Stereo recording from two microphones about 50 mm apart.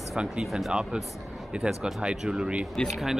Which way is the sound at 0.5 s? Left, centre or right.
Centre.